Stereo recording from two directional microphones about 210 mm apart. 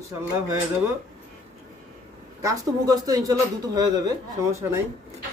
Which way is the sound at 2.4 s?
15° right (ahead or behind).